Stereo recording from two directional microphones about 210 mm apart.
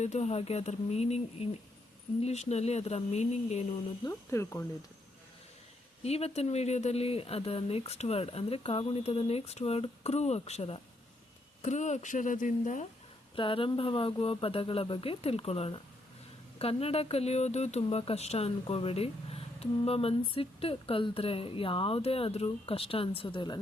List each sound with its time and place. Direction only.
0.0 s speech: 30° left (ahead or behind)
4.0 s speech: 15° left (ahead or behind)
6.0 s speech: 30° left (ahead or behind)
13.3 s speech: 25° left (ahead or behind)